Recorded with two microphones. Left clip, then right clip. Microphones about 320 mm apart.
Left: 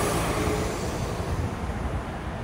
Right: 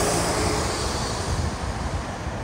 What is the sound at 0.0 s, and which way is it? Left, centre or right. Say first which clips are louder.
Vehicle: right 3 dB; right.